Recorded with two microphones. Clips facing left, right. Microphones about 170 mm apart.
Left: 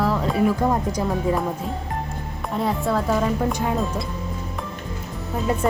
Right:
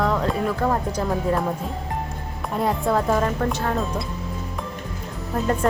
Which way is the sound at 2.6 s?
Centre (ahead or behind).